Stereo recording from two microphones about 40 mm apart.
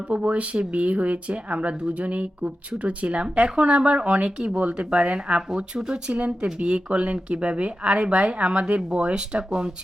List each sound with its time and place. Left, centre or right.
0.1 s speech: right
3.3 s speech: right
3.6 s speech: right